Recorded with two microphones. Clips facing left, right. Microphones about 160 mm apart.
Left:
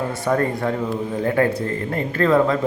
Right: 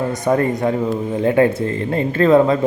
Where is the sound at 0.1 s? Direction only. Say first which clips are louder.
Right 3 dB; 20° right (ahead or behind).